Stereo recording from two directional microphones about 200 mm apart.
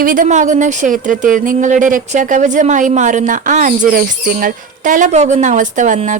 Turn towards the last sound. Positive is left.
turn(degrees=-40)  # may be behind; listen again after turning